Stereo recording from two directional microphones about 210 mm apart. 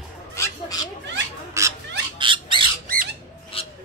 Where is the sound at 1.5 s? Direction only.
15° right (ahead or behind).